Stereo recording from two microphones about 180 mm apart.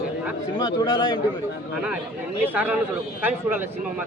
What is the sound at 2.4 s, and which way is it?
A man's voice, 10° right (ahead or behind).